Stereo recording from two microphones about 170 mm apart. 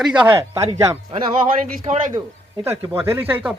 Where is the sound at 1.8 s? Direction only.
40° right (ahead or behind).